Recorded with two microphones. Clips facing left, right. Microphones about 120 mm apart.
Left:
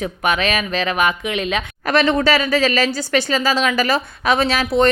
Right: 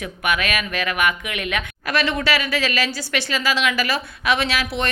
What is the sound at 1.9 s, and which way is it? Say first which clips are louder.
A woman's voice: left 6 dB; 50° left (ahead or behind).